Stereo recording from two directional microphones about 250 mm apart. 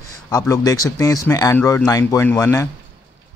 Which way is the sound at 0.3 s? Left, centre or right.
Centre.